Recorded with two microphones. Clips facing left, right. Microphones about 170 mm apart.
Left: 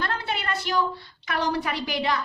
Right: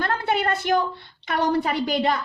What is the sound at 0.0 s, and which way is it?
A woman's voice, 50° right (ahead or behind).